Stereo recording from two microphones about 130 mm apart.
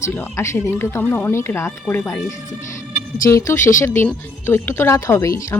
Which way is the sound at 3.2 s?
20° left (ahead or behind).